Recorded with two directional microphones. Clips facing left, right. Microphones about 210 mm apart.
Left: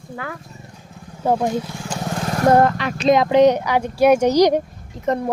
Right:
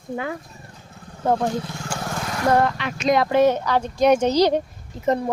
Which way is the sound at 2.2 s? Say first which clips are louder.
Left 5 dB; 35° left (ahead or behind).